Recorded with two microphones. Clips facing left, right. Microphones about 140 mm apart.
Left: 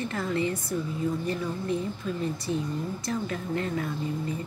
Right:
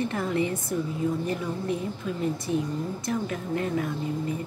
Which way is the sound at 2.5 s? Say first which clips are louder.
Right 2 dB; 15° right (ahead or behind).